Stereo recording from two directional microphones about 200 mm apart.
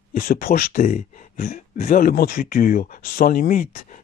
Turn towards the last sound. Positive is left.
turn(degrees=45)  # may be behind; listen again after turning